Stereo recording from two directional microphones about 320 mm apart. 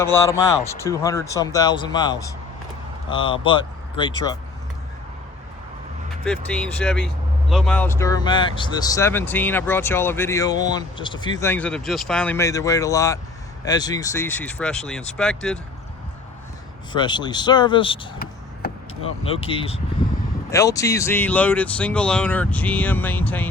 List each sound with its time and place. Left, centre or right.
0.0 s speech: centre
6.2 s speech: centre
16.9 s speech: centre
18.6 s vehicle: left
19.0 s speech: centre